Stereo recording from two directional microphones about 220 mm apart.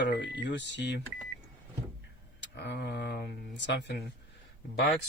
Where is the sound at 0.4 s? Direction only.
55° left (ahead or behind).